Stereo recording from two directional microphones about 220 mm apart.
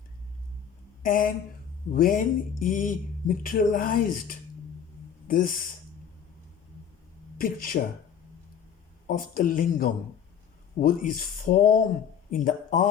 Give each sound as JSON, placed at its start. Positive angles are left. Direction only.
{"t": 1.0, "sound": "speech", "side_deg": 40}
{"t": 7.3, "sound": "speech", "side_deg": 40}
{"t": 9.0, "sound": "speech", "side_deg": 40}